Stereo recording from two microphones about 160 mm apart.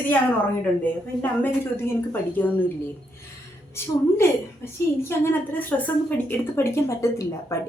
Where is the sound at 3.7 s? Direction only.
15° left (ahead or behind).